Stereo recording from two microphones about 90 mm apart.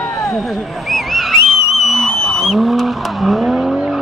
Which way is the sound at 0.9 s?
Centre (ahead or behind).